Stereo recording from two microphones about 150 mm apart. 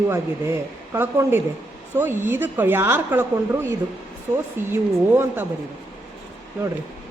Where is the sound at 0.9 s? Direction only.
15° right (ahead or behind).